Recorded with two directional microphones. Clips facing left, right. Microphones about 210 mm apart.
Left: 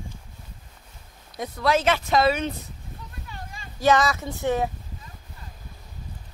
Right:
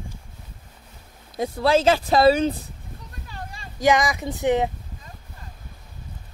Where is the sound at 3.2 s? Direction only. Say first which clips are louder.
Right 4 dB; 35° right (ahead or behind).